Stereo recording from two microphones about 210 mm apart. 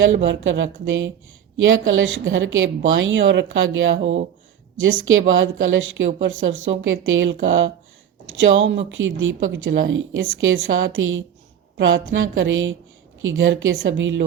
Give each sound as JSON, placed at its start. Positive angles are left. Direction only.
{"t": 0.0, "sound": "a woman's voice", "side_deg": -60}
{"t": 5.4, "sound": "a woman's voice", "side_deg": -65}